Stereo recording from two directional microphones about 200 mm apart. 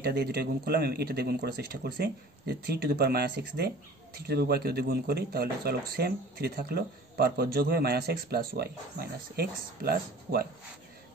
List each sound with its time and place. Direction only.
0.0 s speech: 50° right (ahead or behind)